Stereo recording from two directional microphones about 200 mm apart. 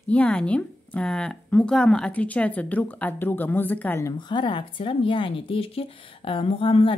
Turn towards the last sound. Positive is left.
turn(degrees=25)  # may be behind; listen again after turning